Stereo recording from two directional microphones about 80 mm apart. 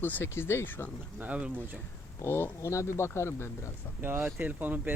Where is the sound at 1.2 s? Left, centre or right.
Centre.